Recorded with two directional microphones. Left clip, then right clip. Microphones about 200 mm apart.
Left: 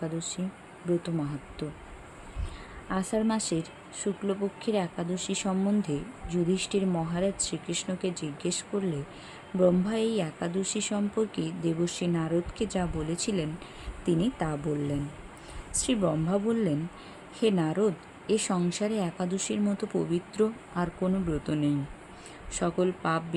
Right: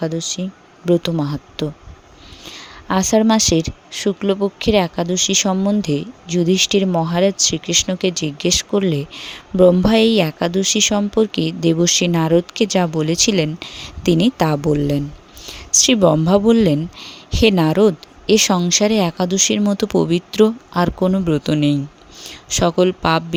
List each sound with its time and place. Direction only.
0.0 s speech: 35° right (ahead or behind)